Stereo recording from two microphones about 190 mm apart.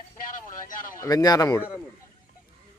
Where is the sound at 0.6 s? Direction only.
45° left (ahead or behind).